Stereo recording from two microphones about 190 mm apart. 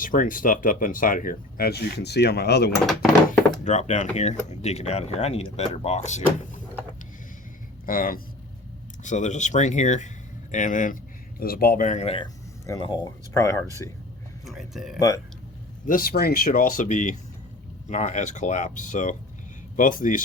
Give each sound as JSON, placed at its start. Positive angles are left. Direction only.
{"t": 0.0, "sound": "speech", "side_deg": 45}
{"t": 3.6, "sound": "speech", "side_deg": 40}
{"t": 7.9, "sound": "speech", "side_deg": 50}
{"t": 14.4, "sound": "speech", "side_deg": 0}
{"t": 14.9, "sound": "speech", "side_deg": 20}
{"t": 15.9, "sound": "speech", "side_deg": 50}